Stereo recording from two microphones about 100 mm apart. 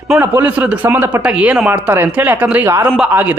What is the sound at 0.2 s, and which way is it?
A woman's voice, 20° right (ahead or behind).